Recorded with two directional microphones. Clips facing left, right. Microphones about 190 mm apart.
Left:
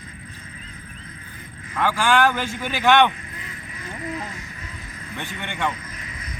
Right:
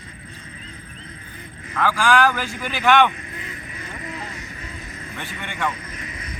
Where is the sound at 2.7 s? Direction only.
Centre (ahead or behind).